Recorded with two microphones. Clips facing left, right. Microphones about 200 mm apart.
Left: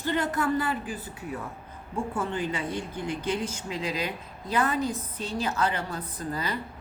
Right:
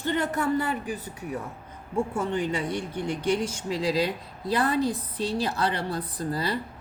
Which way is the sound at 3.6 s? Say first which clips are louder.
Right 9 dB; 35° right (ahead or behind).